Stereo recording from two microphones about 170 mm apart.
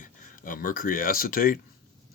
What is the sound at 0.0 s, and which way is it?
Speech, 50° left (ahead or behind).